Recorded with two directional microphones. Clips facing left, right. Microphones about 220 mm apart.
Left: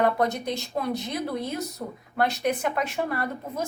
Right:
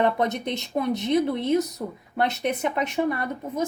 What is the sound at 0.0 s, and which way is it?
A woman's voice, 20° right (ahead or behind).